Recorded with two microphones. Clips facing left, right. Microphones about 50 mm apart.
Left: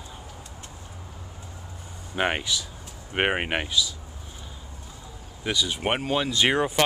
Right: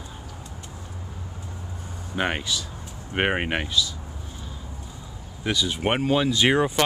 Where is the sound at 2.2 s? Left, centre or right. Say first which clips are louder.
Even; centre.